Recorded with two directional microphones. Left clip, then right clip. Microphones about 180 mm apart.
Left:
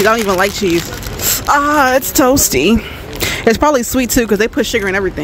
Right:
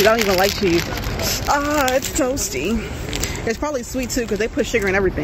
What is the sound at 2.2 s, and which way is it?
Speech, 70° left (ahead or behind).